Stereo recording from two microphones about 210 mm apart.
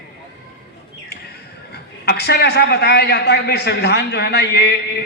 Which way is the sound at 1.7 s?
50° left (ahead or behind).